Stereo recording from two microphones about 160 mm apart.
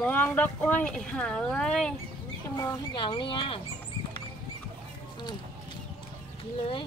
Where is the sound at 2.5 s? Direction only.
25° left (ahead or behind).